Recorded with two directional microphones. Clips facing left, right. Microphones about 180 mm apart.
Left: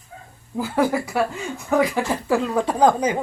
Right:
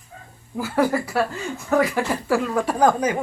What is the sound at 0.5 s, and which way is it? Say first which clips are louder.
Speech: even; 15° left (ahead or behind).